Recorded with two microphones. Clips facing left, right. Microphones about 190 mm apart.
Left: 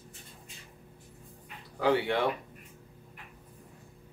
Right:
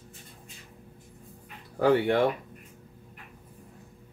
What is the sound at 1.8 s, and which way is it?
Speech, 45° right (ahead or behind).